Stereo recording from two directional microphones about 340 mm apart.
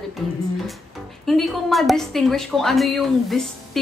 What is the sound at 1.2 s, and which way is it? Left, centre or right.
A woman's voice, centre.